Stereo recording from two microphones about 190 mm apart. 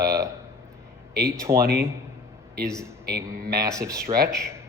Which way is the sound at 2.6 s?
5° left (ahead or behind).